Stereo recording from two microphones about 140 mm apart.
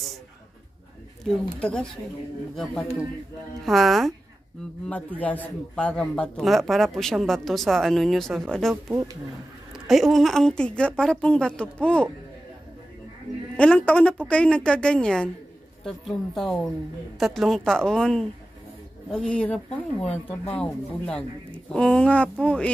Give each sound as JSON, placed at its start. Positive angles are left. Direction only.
{"t": 1.2, "sound": "a woman's voice", "side_deg": 5}
{"t": 8.8, "sound": "speech", "side_deg": -20}
{"t": 9.7, "sound": "a woman's voice", "side_deg": 0}
{"t": 13.6, "sound": "a woman's voice", "side_deg": 10}